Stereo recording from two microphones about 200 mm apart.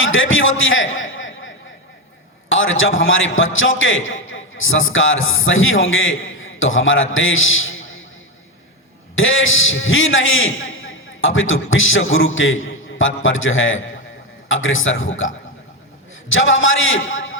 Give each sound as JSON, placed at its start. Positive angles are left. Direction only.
{"t": 0.0, "sound": "a man's voice", "side_deg": 75}
{"t": 2.5, "sound": "a man's voice", "side_deg": 75}
{"t": 9.1, "sound": "a man's voice", "side_deg": 75}
{"t": 16.3, "sound": "a man's voice", "side_deg": 75}